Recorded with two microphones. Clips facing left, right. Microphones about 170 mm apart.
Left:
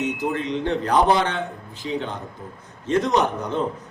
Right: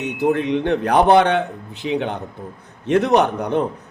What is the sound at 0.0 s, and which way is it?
A man's voice, 60° right (ahead or behind).